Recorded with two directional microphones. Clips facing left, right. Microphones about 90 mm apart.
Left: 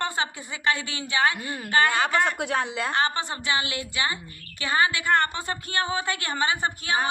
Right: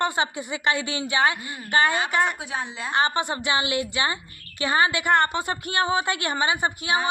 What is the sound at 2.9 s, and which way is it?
A woman's voice, 20° right (ahead or behind).